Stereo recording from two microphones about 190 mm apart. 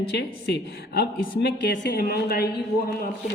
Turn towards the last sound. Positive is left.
turn(degrees=55)  # may be behind; listen again after turning